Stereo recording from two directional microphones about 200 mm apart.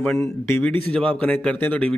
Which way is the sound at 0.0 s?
5° left (ahead or behind).